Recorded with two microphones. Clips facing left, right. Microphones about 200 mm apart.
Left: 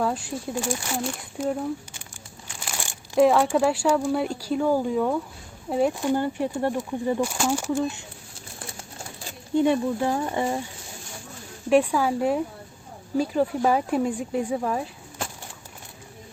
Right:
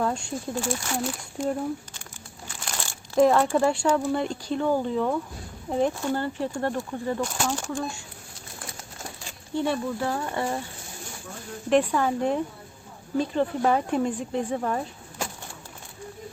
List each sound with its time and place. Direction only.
0.0 s speech: 5° left (ahead or behind)
2.8 s crumpling: 15° left (ahead or behind)
3.2 s speech: centre (ahead or behind)
7.8 s speech: 20° left (ahead or behind)
9.6 s speech: 15° left (ahead or behind)
11.7 s speech: 10° left (ahead or behind)